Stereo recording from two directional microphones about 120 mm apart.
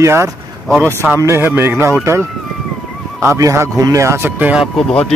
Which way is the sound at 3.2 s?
25° right (ahead or behind).